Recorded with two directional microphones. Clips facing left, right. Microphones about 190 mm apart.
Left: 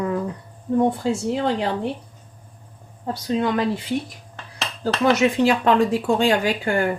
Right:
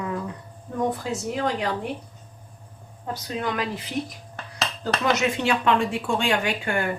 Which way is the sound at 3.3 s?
25° left (ahead or behind).